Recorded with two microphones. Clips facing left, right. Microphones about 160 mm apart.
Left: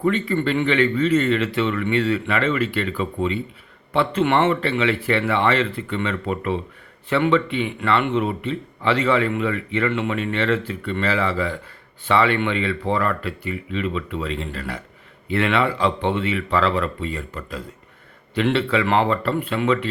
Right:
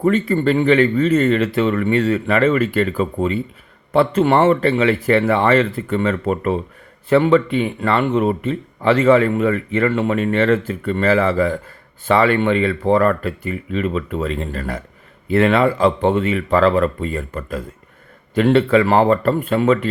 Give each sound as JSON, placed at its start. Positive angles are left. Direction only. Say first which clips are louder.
{"t": 0.0, "sound": "speech", "louder": "right 4 dB", "side_deg": -45}